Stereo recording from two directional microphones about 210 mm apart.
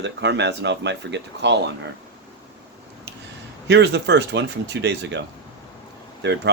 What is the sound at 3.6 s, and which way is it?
Speech, 55° right (ahead or behind).